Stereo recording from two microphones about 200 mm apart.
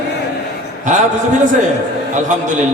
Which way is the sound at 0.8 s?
40° right (ahead or behind).